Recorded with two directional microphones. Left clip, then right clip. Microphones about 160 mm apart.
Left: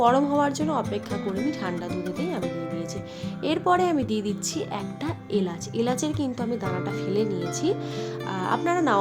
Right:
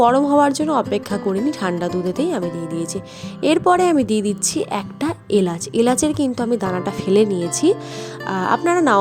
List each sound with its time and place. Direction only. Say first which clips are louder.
0.0 s speech: right 7 dB; 40° right (ahead or behind)